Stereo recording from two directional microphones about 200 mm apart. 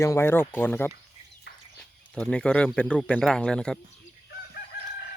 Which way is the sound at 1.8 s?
5° left (ahead or behind).